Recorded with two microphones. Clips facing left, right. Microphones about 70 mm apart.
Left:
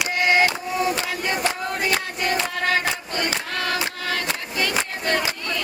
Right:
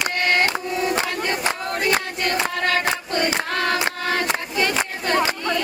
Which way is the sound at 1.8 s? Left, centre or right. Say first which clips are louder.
Right 3 dB; right.